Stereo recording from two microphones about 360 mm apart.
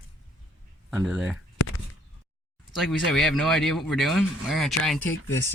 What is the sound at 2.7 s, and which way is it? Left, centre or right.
Speech, centre.